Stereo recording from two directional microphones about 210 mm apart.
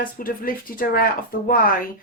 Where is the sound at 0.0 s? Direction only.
45° left (ahead or behind).